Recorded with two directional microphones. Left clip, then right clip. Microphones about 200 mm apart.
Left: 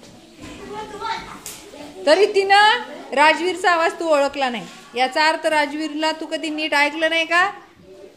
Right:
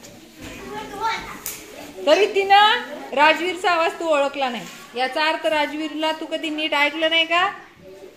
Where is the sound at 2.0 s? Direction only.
20° left (ahead or behind).